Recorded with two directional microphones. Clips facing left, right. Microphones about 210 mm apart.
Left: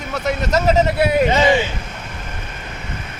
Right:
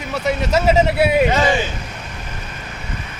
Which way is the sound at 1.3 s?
20° left (ahead or behind).